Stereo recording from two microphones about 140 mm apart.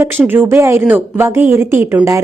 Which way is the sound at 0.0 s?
15° right (ahead or behind).